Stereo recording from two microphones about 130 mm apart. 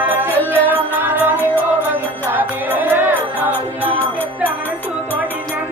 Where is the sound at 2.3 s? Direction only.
15° right (ahead or behind).